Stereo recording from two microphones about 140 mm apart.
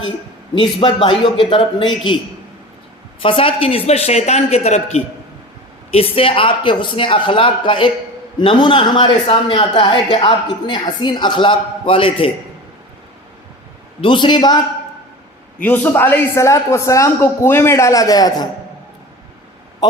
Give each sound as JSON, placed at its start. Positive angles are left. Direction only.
{"t": 0.6, "sound": "a man's voice", "side_deg": 35}
{"t": 3.2, "sound": "a man's voice", "side_deg": 40}
{"t": 14.0, "sound": "a man's voice", "side_deg": 35}
{"t": 15.5, "sound": "a man's voice", "side_deg": 10}